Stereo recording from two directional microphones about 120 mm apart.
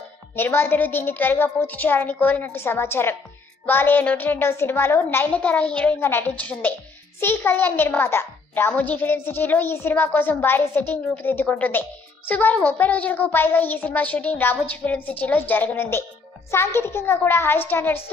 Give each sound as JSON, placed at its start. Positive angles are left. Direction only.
{"t": 0.4, "sound": "a child's voice", "side_deg": 15}